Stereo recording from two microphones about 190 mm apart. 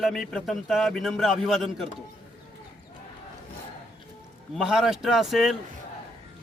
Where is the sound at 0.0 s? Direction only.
Centre (ahead or behind).